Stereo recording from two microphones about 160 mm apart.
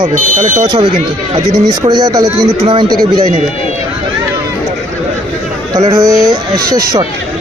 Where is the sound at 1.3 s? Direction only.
25° right (ahead or behind).